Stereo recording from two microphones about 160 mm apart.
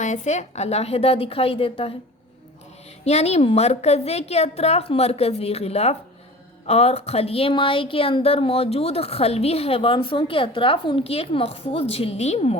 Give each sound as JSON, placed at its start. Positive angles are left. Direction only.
{"t": 0.0, "sound": "speech", "side_deg": 50}
{"t": 3.0, "sound": "speech", "side_deg": 45}